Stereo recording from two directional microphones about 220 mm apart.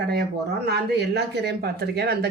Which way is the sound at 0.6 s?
45° right (ahead or behind).